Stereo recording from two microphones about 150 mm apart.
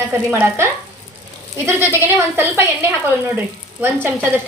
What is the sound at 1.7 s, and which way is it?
A woman's voice, 15° right (ahead or behind).